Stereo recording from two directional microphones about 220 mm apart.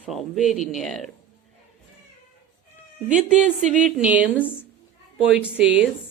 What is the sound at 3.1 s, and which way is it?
Speech, 5° right (ahead or behind).